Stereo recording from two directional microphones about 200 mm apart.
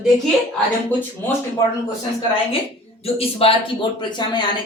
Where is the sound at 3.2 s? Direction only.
30° left (ahead or behind).